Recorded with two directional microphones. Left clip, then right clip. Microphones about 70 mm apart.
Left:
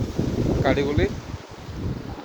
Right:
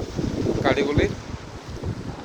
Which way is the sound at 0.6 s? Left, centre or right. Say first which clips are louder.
Right 1 dB; left.